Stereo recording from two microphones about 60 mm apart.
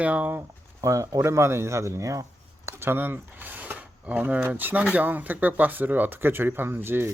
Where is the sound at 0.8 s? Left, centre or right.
Right.